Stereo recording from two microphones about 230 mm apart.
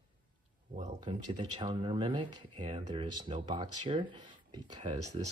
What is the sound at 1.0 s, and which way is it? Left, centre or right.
Speech, centre.